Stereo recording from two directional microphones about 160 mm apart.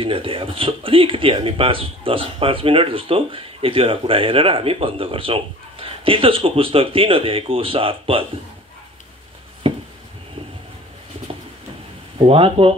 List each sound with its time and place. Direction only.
0.0 s speech: 35° right (ahead or behind)
9.6 s a sound: 35° right (ahead or behind)
12.2 s speech: 35° right (ahead or behind)